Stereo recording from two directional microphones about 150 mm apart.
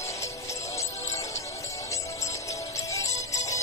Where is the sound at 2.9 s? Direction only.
20° left (ahead or behind).